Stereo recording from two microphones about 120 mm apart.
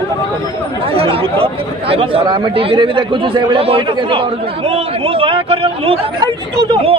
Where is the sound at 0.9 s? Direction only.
55° right (ahead or behind).